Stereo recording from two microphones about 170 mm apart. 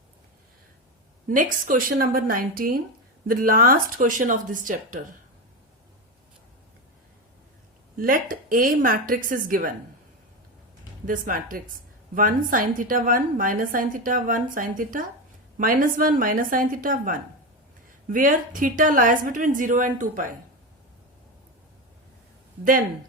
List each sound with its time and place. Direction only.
1.3 s a woman's voice: 50° right (ahead or behind)
7.9 s speech: 55° right (ahead or behind)
11.0 s a woman's voice: 55° right (ahead or behind)